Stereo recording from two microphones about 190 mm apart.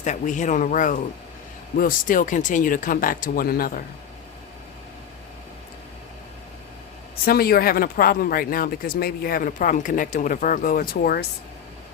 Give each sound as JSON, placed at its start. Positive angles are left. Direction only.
{"t": 0.0, "sound": "speech", "side_deg": 40}
{"t": 7.3, "sound": "speech", "side_deg": 55}